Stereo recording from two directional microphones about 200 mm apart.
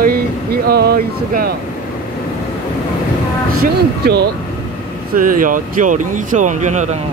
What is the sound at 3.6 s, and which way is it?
Speech, 50° right (ahead or behind).